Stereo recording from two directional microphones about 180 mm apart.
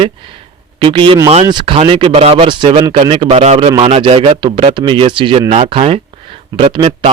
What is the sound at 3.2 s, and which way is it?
A man's voice, 35° right (ahead or behind).